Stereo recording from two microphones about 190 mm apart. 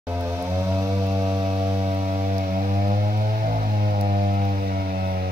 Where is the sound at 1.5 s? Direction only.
40° right (ahead or behind).